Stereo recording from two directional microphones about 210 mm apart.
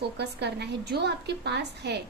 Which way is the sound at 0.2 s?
50° right (ahead or behind).